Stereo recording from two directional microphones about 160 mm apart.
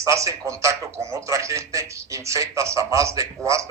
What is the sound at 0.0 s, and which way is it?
A man's voice, 20° right (ahead or behind).